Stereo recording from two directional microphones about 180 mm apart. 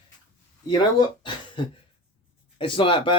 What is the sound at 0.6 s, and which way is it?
Speech, 25° left (ahead or behind).